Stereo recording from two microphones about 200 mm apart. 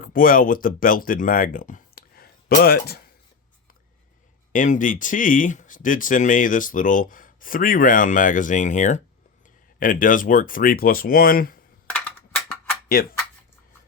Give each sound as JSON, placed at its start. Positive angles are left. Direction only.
{"t": 0.0, "sound": "speech", "side_deg": 45}
{"t": 4.5, "sound": "speech", "side_deg": 40}
{"t": 11.9, "sound": "a sound", "side_deg": 5}